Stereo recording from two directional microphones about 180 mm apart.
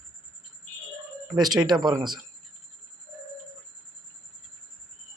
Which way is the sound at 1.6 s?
25° right (ahead or behind).